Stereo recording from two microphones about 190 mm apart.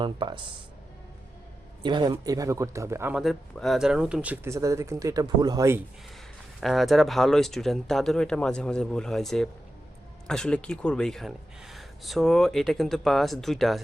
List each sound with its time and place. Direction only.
0.0 s speech: 25° right (ahead or behind)
1.8 s speech: 25° right (ahead or behind)
6.6 s speech: centre (ahead or behind)